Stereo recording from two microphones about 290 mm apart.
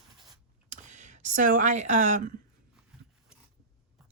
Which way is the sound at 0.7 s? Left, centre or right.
Right.